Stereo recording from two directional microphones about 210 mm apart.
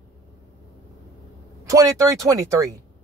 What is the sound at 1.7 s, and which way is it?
Speech, 15° right (ahead or behind).